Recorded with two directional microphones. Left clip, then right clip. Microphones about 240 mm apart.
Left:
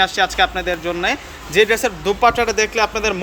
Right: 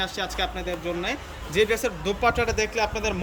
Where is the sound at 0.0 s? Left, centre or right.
Centre.